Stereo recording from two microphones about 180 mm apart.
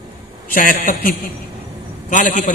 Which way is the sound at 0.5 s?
50° left (ahead or behind).